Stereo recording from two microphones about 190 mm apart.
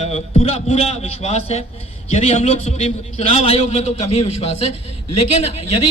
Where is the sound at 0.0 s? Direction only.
35° left (ahead or behind).